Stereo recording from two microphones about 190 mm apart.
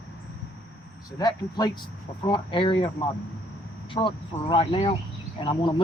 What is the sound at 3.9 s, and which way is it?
Speech, 25° left (ahead or behind).